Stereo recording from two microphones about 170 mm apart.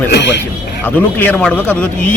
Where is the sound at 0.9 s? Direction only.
10° left (ahead or behind).